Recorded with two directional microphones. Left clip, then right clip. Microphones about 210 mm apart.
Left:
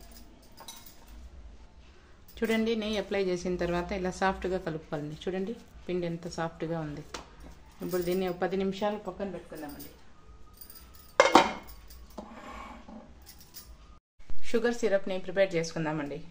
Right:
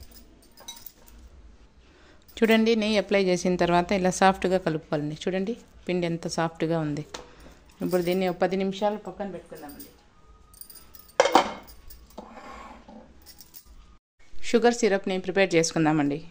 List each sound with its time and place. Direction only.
2.3 s a woman's voice: 45° right (ahead or behind)
14.4 s a woman's voice: 40° right (ahead or behind)